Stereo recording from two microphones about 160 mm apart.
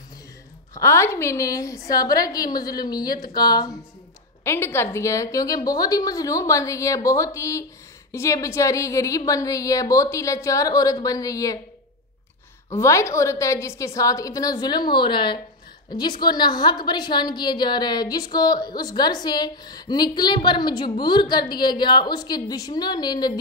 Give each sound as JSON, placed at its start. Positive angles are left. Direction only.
{"t": 0.7, "sound": "a woman's voice", "side_deg": 20}
{"t": 12.7, "sound": "a woman's voice", "side_deg": 15}